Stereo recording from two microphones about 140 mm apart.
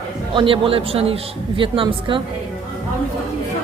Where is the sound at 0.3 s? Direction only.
40° right (ahead or behind).